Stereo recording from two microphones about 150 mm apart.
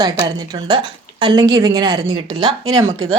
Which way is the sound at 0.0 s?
25° right (ahead or behind).